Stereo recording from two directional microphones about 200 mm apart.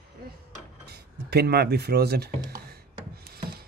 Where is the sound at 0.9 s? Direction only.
55° right (ahead or behind).